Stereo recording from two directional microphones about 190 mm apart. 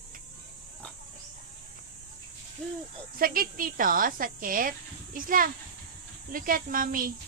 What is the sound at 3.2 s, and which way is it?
Speech, 50° right (ahead or behind).